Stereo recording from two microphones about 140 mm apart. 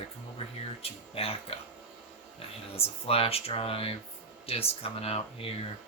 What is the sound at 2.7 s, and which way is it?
Speech, 45° left (ahead or behind).